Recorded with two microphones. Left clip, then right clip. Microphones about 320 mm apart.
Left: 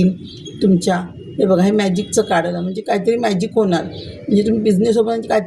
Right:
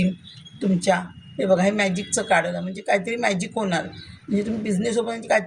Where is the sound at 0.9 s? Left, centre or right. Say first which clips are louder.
Left 4 dB; right.